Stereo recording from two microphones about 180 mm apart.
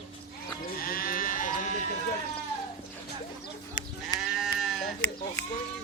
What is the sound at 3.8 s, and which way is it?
Sheep, 50° left (ahead or behind).